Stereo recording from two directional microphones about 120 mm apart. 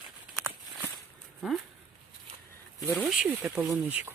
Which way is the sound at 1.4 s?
Centre (ahead or behind).